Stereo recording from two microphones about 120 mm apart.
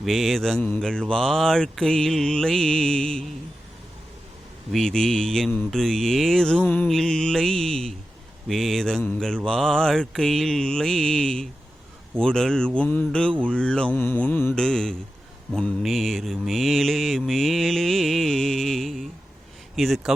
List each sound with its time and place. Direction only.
0.0 s mantra: centre (ahead or behind)
4.7 s mantra: 5° left (ahead or behind)